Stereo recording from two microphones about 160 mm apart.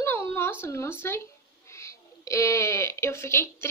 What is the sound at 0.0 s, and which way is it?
Speech, 15° left (ahead or behind).